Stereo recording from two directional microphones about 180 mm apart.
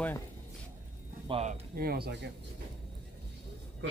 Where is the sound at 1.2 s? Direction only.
30° right (ahead or behind).